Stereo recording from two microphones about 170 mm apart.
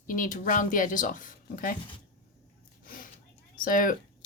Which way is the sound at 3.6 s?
55° left (ahead or behind).